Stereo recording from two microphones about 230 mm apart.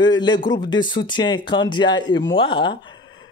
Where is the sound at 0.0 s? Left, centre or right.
Centre.